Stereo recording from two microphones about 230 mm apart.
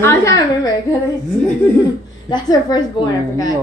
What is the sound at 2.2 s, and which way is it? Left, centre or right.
A woman's voice, centre.